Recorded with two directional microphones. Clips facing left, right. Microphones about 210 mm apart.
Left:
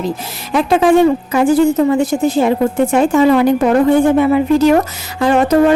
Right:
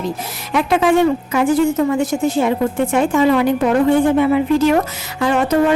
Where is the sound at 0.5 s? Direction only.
35° left (ahead or behind).